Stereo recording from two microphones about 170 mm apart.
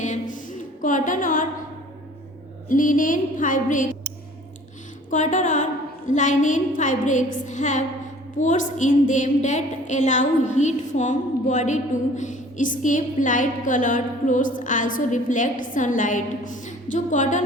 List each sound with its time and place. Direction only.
0.0 s music: 50° left (ahead or behind)
2.6 s a woman's voice: 50° left (ahead or behind)
5.1 s a woman's voice: 45° left (ahead or behind)